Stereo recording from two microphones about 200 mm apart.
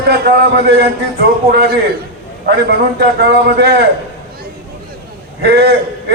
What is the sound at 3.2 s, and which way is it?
Speech, 55° right (ahead or behind).